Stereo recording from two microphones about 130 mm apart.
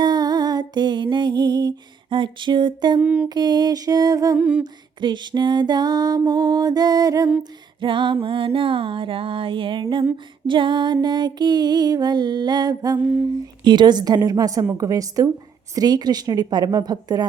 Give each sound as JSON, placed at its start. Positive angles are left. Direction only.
{"t": 0.0, "sound": "music", "side_deg": -30}
{"t": 3.0, "sound": "a sound", "side_deg": -10}
{"t": 3.2, "sound": "music", "side_deg": -35}
{"t": 4.4, "sound": "a sound", "side_deg": -10}
{"t": 4.6, "sound": "music", "side_deg": -35}
{"t": 7.8, "sound": "music", "side_deg": -40}